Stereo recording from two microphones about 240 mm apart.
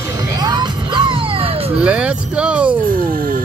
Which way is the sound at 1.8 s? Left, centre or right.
Centre.